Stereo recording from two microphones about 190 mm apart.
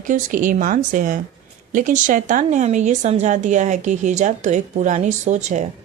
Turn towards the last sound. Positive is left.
turn(degrees=-40)  # may be behind; listen again after turning